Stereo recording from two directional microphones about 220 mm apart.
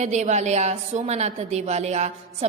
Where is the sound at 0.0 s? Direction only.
30° right (ahead or behind).